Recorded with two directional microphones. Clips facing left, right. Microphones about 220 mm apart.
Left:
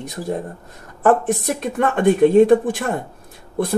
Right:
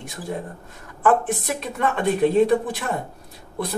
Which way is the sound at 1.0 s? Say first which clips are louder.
Left 4 dB; 45° left (ahead or behind).